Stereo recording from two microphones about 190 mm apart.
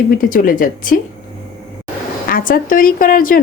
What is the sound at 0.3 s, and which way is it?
Speech, 45° left (ahead or behind).